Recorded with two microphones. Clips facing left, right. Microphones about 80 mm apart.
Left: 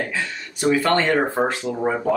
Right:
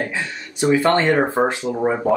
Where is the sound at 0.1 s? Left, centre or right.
Right.